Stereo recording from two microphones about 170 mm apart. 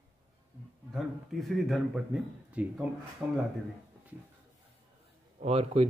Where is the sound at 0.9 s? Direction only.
Centre (ahead or behind).